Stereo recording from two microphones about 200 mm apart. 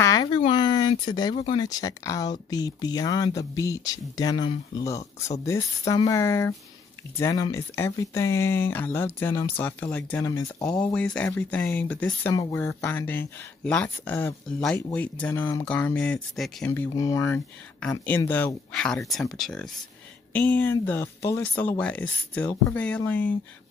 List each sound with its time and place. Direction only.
0.0 s speech: 20° left (ahead or behind); by 16.7 s centre (ahead or behind)
16.7 s speech: 15° left (ahead or behind)